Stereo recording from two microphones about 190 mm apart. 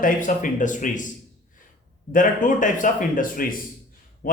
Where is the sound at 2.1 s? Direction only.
45° left (ahead or behind).